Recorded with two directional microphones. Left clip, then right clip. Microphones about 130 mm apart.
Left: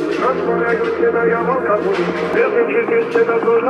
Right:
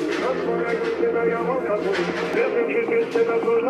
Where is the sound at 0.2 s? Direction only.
45° left (ahead or behind).